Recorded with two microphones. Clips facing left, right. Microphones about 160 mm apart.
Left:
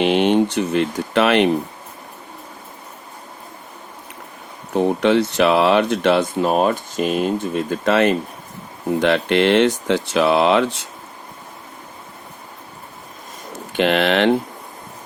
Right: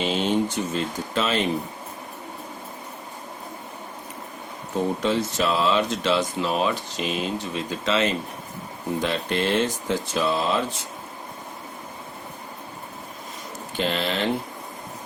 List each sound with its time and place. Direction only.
0.0 s speech: 65° left (ahead or behind)
4.7 s speech: 70° left (ahead or behind)
9.0 s speech: 70° left (ahead or behind)
13.7 s speech: 70° left (ahead or behind)